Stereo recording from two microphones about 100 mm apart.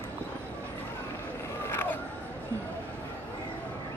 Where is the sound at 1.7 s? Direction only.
20° left (ahead or behind).